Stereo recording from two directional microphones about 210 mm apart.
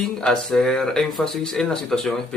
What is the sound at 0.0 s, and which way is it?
Speech, 5° left (ahead or behind).